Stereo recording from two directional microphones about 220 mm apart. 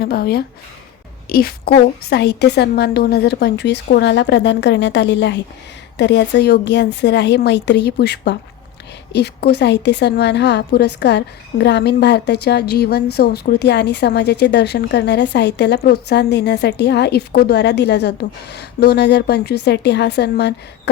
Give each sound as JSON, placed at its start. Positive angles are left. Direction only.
{"t": 0.0, "sound": "speech", "side_deg": 45}